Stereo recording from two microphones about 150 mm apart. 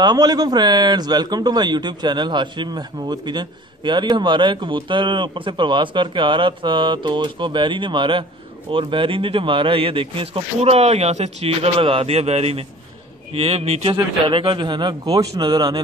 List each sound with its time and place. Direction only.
0.0 s a man's voice: 25° right (ahead or behind)